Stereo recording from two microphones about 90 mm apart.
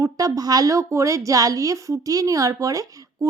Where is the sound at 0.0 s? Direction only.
40° right (ahead or behind).